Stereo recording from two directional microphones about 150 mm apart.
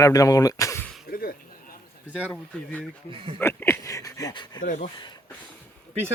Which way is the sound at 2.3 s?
10° left (ahead or behind).